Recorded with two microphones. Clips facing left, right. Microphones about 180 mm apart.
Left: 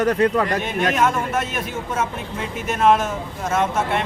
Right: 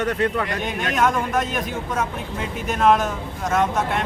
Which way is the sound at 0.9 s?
5° left (ahead or behind).